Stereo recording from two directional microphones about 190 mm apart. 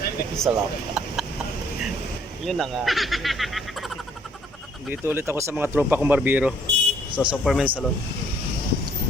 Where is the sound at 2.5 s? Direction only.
Centre (ahead or behind).